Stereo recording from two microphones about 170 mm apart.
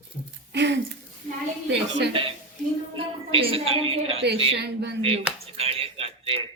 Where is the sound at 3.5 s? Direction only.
35° right (ahead or behind).